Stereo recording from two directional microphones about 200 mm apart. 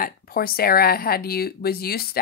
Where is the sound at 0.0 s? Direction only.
45° left (ahead or behind).